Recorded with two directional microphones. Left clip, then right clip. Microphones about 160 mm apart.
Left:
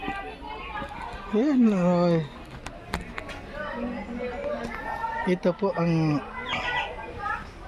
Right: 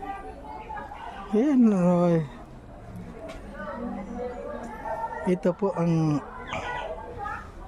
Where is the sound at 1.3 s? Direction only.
20° right (ahead or behind).